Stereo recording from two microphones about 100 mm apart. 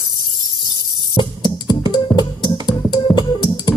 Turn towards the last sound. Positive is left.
turn(degrees=50)  # may be behind; listen again after turning